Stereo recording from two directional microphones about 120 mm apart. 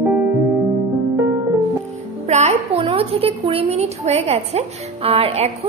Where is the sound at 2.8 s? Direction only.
50° right (ahead or behind).